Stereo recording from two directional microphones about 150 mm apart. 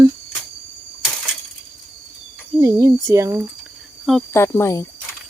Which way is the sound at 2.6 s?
20° right (ahead or behind).